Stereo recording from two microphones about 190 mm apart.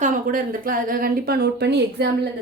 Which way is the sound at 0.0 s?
45° right (ahead or behind).